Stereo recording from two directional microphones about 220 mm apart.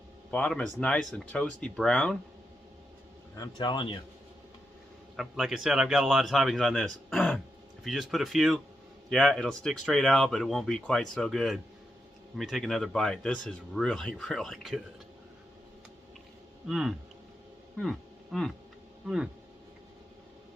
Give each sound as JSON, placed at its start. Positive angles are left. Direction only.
{"t": 0.3, "sound": "speech", "side_deg": 5}
{"t": 3.3, "sound": "speech", "side_deg": 20}
{"t": 5.1, "sound": "speech", "side_deg": 0}
{"t": 16.6, "sound": "speech", "side_deg": -5}
{"t": 17.7, "sound": "a sound", "side_deg": 0}
{"t": 19.0, "sound": "speech", "side_deg": -5}